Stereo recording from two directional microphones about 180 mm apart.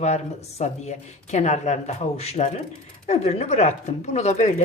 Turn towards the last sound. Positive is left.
turn(degrees=40)  # may be behind; listen again after turning